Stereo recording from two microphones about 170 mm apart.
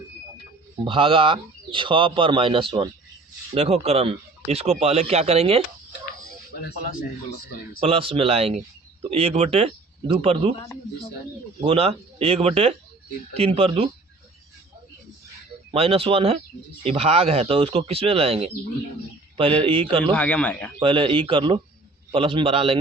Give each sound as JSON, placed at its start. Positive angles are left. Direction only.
{"t": 0.9, "sound": "speech", "side_deg": -30}
{"t": 7.8, "sound": "speech", "side_deg": -35}
{"t": 11.6, "sound": "speech", "side_deg": -35}
{"t": 15.7, "sound": "speech", "side_deg": -35}
{"t": 19.6, "sound": "speech", "side_deg": -30}
{"t": 20.1, "sound": "speech", "side_deg": 5}
{"t": 20.7, "sound": "speech", "side_deg": -30}